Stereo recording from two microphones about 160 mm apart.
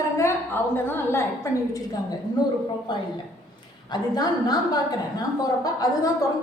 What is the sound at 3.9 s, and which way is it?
A woman's voice, 25° left (ahead or behind).